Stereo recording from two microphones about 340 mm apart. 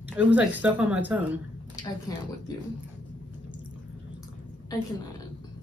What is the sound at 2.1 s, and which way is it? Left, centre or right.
Speech, centre.